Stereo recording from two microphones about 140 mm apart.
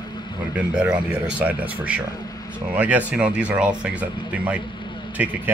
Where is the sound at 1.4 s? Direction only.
10° right (ahead or behind).